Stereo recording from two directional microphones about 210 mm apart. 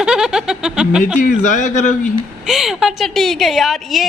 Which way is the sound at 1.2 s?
40° left (ahead or behind).